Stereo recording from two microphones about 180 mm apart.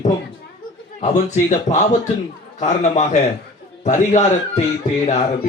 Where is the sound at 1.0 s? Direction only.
40° left (ahead or behind).